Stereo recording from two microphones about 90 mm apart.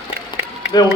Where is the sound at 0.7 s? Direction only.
50° left (ahead or behind).